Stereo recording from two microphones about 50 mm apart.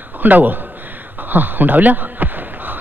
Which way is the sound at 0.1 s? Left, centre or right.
Right.